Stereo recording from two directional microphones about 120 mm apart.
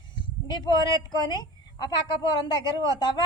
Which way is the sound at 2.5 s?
40° left (ahead or behind).